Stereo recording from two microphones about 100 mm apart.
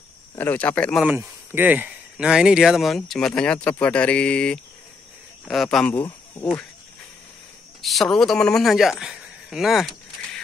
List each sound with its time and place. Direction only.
0.4 s mantra: 20° left (ahead or behind)
1.0 s speech: 20° right (ahead or behind); by 3.7 s 10° left (ahead or behind)
3.8 s mantra: 10° left (ahead or behind)
5.5 s speech: 5° left (ahead or behind)
5.9 s speech: 25° left (ahead or behind)
7.8 s speech: centre (ahead or behind)